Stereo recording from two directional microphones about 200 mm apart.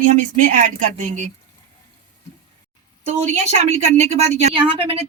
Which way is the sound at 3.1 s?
35° right (ahead or behind).